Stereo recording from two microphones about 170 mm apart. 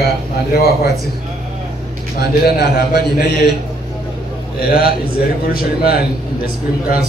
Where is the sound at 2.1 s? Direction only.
65° left (ahead or behind).